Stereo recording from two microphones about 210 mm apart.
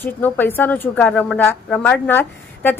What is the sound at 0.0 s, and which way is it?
A woman's voice, 10° left (ahead or behind).